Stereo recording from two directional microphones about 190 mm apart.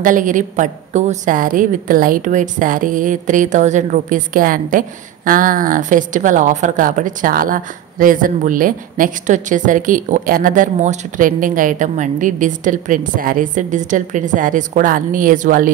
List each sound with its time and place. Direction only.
0.0 s a woman's voice: 45° right (ahead or behind)